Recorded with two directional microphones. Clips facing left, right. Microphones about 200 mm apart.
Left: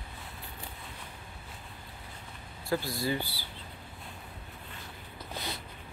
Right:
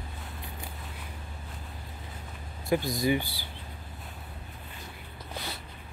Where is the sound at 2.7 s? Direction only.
15° right (ahead or behind).